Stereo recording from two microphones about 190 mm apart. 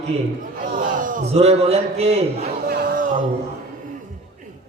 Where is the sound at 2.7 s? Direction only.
50° right (ahead or behind).